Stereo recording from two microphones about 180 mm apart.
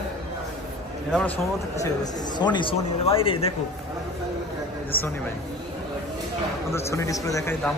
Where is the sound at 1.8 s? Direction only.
20° left (ahead or behind).